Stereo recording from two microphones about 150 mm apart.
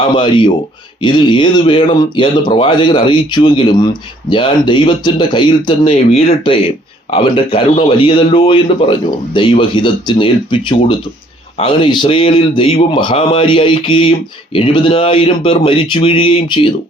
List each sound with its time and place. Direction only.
0.1 s a man's voice: 30° left (ahead or behind)
6.1 s a man's voice: 45° left (ahead or behind)